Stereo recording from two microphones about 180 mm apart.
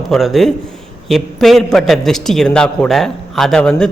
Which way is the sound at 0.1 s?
Centre (ahead or behind).